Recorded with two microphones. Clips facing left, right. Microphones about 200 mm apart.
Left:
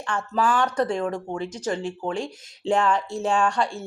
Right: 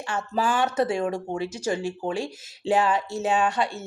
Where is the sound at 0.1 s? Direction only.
5° right (ahead or behind).